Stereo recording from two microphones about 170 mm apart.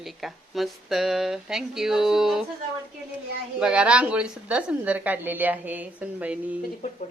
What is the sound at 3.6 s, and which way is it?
A woman's voice, 5° right (ahead or behind).